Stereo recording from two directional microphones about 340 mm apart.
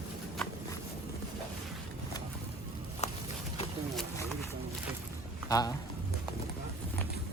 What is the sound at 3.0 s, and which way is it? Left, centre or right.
Walk, centre.